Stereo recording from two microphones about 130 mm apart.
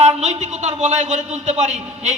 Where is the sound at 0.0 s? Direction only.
60° right (ahead or behind).